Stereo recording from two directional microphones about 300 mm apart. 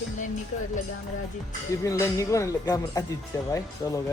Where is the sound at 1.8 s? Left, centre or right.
Centre.